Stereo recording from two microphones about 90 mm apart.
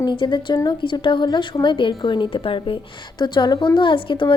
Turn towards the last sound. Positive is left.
turn(degrees=70)  # may be behind; listen again after turning